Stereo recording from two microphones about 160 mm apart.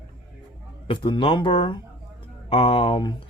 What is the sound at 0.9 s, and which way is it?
Speech, 30° left (ahead or behind).